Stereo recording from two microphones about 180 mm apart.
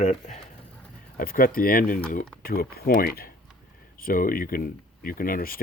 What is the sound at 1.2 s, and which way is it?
Speech, 50° left (ahead or behind).